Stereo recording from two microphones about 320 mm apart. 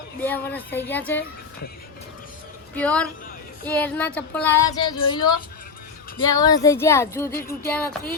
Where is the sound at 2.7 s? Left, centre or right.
Centre.